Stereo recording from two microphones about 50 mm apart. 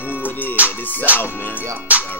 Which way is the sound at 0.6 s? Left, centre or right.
Right.